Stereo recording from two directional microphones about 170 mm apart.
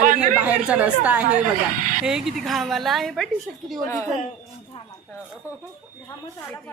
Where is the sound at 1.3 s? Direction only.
50° right (ahead or behind).